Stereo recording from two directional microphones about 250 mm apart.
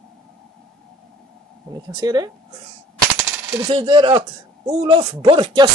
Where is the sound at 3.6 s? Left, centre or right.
Right.